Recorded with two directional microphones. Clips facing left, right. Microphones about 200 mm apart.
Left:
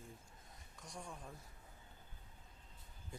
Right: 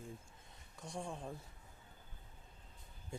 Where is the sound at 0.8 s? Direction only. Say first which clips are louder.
Right 7 dB; 30° right (ahead or behind).